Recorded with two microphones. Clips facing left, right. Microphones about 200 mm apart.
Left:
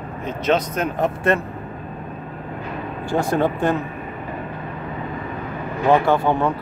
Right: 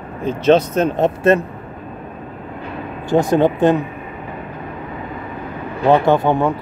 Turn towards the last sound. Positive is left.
turn(degrees=-20)  # may be behind; listen again after turning